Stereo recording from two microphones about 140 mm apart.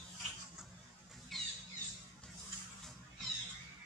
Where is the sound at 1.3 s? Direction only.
Centre (ahead or behind).